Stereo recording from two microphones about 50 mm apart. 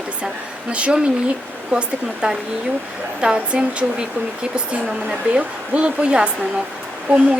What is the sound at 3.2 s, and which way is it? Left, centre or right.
Speech, centre.